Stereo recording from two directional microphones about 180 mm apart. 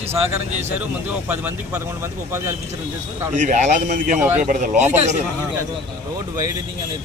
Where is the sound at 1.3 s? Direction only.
10° right (ahead or behind).